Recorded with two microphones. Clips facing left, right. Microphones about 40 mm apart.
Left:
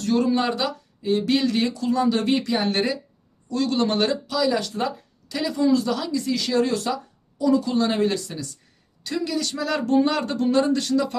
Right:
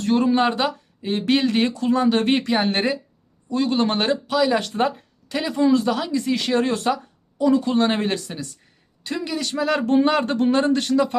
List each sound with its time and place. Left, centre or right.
0.0 s speech: right
3.5 s speech: right